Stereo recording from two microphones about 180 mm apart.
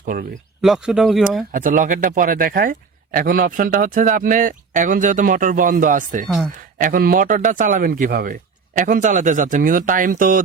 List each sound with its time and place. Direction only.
0.1 s a man's voice: 50° right (ahead or behind)
0.6 s speech: 5° right (ahead or behind)
1.5 s a man's voice: 50° right (ahead or behind)
6.2 s speech: centre (ahead or behind)
6.7 s a man's voice: 55° right (ahead or behind)